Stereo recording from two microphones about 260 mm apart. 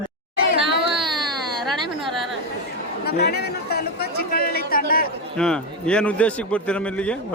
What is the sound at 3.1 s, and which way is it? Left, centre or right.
Chatter, left.